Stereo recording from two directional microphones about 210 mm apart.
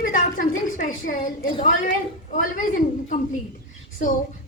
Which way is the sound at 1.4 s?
25° left (ahead or behind).